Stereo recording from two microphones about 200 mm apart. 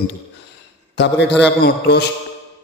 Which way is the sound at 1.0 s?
60° left (ahead or behind).